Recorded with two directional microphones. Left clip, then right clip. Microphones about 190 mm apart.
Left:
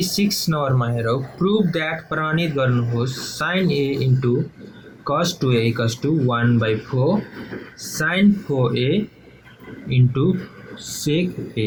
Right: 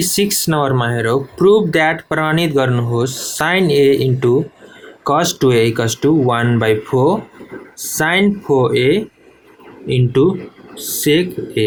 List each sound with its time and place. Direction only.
0.0 s speech: 45° right (ahead or behind)